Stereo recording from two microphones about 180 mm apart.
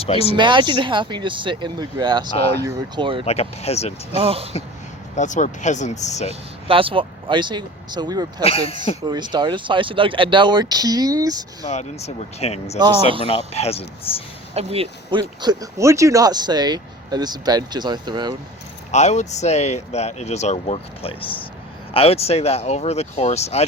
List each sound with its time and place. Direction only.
0.0 s speech: 35° left (ahead or behind)
0.3 s speech: 25° right (ahead or behind)
3.2 s speech: 35° left (ahead or behind)
4.2 s speech: 35° right (ahead or behind)
5.1 s speech: 45° left (ahead or behind)
6.7 s speech: 30° right (ahead or behind)
8.4 s speech: 35° left (ahead or behind)
9.0 s speech: 25° right (ahead or behind)
11.6 s speech: 35° left (ahead or behind)
14.5 s speech: 35° right (ahead or behind)
18.9 s speech: 40° left (ahead or behind)